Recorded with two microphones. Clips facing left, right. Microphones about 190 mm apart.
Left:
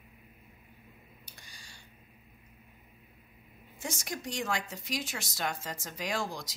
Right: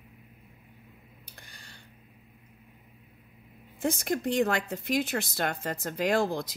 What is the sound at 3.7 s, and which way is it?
Speech, 55° right (ahead or behind).